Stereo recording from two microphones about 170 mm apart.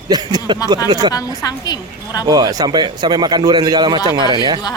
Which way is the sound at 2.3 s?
20° right (ahead or behind).